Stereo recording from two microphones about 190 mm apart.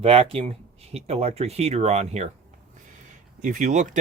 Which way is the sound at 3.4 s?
40° right (ahead or behind).